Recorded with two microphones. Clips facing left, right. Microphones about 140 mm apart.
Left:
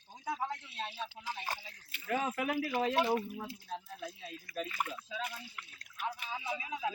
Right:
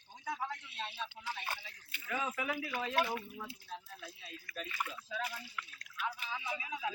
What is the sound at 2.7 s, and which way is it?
Speech, 40° left (ahead or behind).